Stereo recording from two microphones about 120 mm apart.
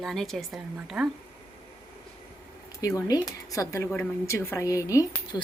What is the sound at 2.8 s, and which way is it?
Speech, 30° left (ahead or behind).